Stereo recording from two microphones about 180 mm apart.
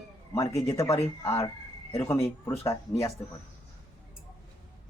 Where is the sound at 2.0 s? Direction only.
15° left (ahead or behind).